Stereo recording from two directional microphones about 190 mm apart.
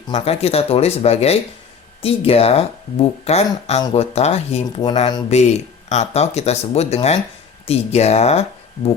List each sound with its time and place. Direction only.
0.1 s speech: 30° left (ahead or behind)
4.9 s speech: 25° left (ahead or behind)
5.3 s speech: 35° left (ahead or behind)